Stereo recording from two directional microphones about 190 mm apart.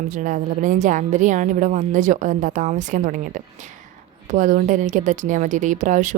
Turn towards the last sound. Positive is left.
turn(degrees=-40)  # may be behind; listen again after turning